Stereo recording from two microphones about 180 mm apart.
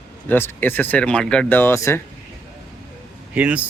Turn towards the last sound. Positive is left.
turn(degrees=-10)  # may be behind; listen again after turning